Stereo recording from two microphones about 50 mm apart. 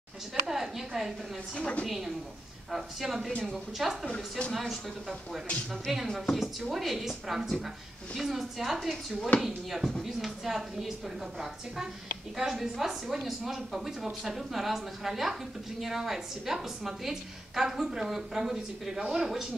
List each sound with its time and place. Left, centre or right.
0.3 s a woman's voice: centre
1.5 s a woman's voice: left
1.9 s a woman's voice: centre
8.7 s a woman's voice: centre